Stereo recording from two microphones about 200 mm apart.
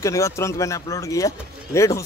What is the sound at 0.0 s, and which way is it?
Speech, 15° left (ahead or behind).